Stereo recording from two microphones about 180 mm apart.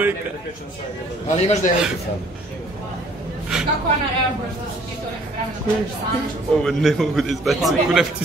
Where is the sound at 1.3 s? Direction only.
40° left (ahead or behind).